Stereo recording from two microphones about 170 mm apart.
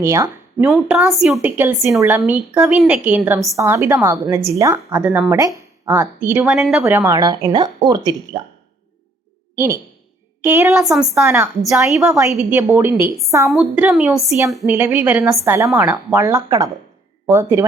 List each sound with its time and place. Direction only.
0.0 s speech: 15° right (ahead or behind)
0.7 s a woman's voice: 5° right (ahead or behind)
1.5 s a woman's voice: 15° right (ahead or behind)
6.8 s speech: 15° right (ahead or behind)
10.4 s a woman's voice: 15° right (ahead or behind)
10.8 s a woman's voice: centre (ahead or behind)
11.1 s a woman's voice: 15° right (ahead or behind)
11.7 s a woman's voice: centre (ahead or behind)
13.5 s a woman's voice: centre (ahead or behind)
14.7 s a woman's voice: 10° right (ahead or behind)